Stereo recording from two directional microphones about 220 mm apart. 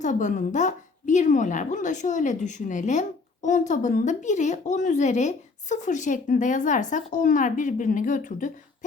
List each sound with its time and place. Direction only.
0.0 s a woman's voice: 35° left (ahead or behind)